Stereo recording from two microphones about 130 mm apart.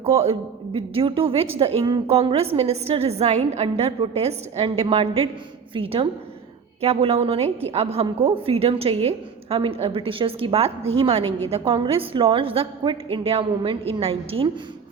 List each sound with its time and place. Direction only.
0.0 s a woman's voice: 50° right (ahead or behind)